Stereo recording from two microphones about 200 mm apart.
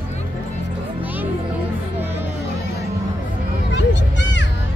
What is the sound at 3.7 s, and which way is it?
Music, 60° left (ahead or behind).